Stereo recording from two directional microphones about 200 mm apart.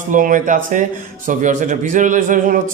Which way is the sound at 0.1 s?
40° right (ahead or behind).